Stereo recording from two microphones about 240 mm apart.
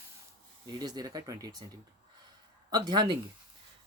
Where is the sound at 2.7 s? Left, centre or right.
Centre.